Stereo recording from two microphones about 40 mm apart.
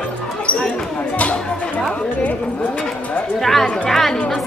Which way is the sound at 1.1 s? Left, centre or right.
Left.